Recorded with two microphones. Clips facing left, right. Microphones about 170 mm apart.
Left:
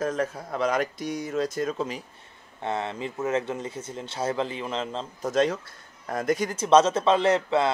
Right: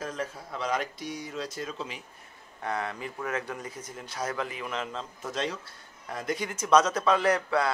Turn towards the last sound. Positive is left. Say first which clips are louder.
# left 4 dB
turn(degrees=25)  # may be behind; listen again after turning